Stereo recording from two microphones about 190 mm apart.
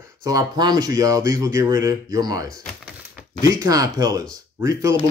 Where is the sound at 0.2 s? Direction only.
20° right (ahead or behind).